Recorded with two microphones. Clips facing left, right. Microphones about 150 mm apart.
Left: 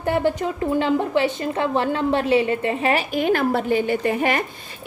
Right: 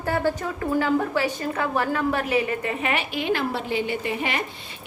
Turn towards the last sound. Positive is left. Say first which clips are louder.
# left 6 dB
turn(degrees=50)  # may be behind; listen again after turning